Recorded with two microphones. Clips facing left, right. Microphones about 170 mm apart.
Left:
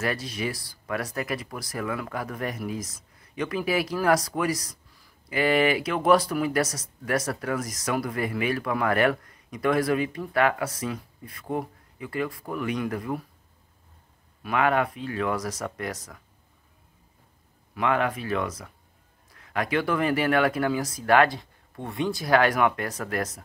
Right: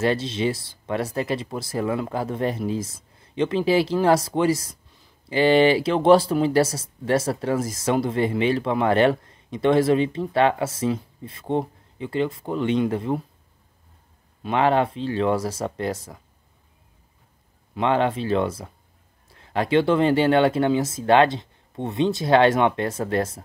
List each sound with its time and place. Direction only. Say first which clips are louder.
0.0 s speech: right 7 dB; 25° right (ahead or behind)
14.4 s speech: right 4 dB; 30° right (ahead or behind)
17.7 s speech: right 4 dB; 25° right (ahead or behind)